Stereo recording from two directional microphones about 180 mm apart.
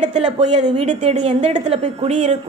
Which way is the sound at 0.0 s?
40° right (ahead or behind).